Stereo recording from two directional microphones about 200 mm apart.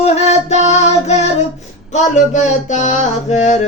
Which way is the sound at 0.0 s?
35° left (ahead or behind).